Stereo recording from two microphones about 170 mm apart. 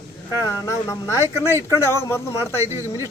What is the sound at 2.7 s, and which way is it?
Speech, 15° right (ahead or behind).